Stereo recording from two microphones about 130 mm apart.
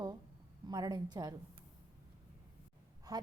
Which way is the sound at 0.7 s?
30° right (ahead or behind).